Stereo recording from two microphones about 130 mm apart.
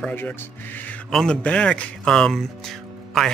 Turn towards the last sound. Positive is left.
turn(degrees=0)  # may be behind; listen again after turning